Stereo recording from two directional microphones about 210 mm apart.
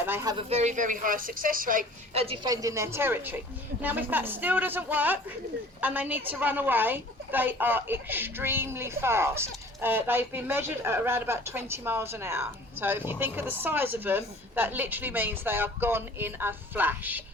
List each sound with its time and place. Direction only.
0.0 s speech: 10° right (ahead or behind)
0.3 s speech: 30° right (ahead or behind)
2.1 s a woman's voice: 25° right (ahead or behind); by 17.2 s 10° right (ahead or behind)